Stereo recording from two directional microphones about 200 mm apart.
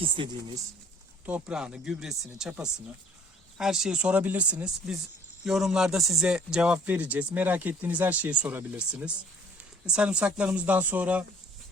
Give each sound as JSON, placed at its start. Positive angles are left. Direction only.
{"t": 1.2, "sound": "a man's voice", "side_deg": -5}